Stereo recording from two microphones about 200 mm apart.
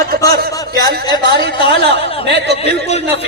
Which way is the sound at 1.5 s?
25° left (ahead or behind).